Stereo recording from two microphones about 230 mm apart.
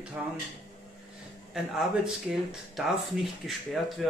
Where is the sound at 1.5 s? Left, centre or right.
Centre.